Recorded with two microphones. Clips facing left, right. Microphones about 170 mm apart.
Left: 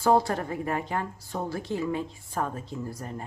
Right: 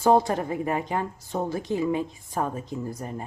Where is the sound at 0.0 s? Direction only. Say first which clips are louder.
Right 3 dB; 20° right (ahead or behind).